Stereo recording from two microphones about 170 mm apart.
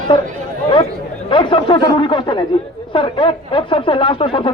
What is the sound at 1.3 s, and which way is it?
Speech, 30° left (ahead or behind).